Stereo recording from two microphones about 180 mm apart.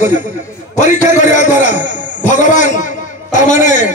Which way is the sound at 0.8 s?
45° left (ahead or behind).